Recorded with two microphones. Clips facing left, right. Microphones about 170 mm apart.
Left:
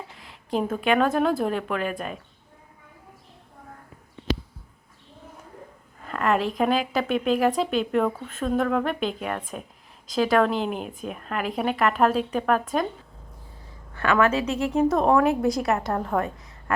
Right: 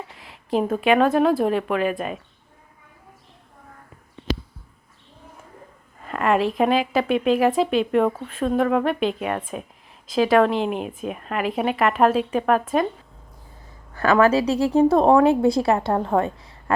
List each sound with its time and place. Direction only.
0.2 s a woman's voice: 5° right (ahead or behind)
6.1 s a woman's voice: 5° right (ahead or behind)
13.9 s a woman's voice: 35° right (ahead or behind)